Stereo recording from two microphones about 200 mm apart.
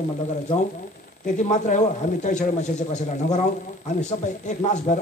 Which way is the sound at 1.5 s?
35° left (ahead or behind).